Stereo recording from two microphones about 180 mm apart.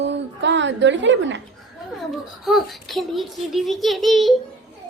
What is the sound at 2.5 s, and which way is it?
A child's voice, centre (ahead or behind).